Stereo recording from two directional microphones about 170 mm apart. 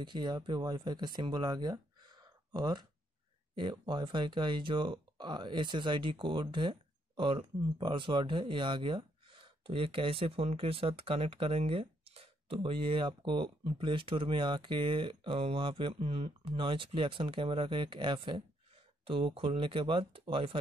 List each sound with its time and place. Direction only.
0.0 s speech: 25° right (ahead or behind)
2.2 s a sound: 25° right (ahead or behind)
3.5 s speech: 30° right (ahead or behind)